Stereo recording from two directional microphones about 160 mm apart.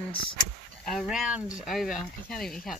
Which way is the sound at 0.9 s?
Centre (ahead or behind).